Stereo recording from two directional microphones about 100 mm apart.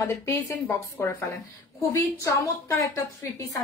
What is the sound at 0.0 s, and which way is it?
A woman's voice, 30° left (ahead or behind).